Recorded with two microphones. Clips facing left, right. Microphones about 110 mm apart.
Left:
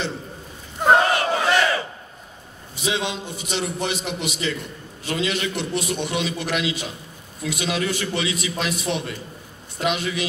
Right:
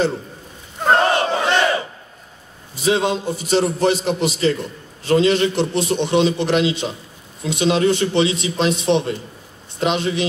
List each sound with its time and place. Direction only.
1.0 s battle cry: 25° right (ahead or behind)
2.7 s a man's voice: 40° right (ahead or behind)